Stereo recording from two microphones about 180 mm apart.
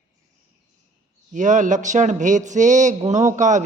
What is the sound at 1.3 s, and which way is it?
Speech, 45° right (ahead or behind).